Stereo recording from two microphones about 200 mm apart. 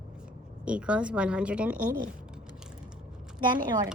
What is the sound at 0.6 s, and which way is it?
Speech, 5° right (ahead or behind).